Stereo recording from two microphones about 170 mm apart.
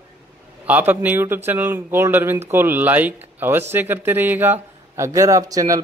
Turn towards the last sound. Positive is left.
turn(degrees=-20)  # may be behind; listen again after turning